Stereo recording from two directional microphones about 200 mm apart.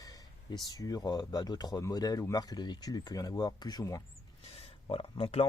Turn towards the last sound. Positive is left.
turn(degrees=25)  # may be behind; listen again after turning